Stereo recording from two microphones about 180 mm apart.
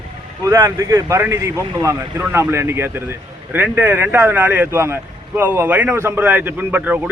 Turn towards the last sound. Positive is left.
turn(degrees=-10)  # may be behind; listen again after turning